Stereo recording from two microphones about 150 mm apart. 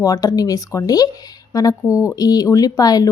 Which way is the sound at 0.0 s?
25° left (ahead or behind).